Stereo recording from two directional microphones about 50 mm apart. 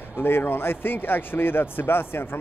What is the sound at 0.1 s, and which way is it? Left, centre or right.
Speech, left.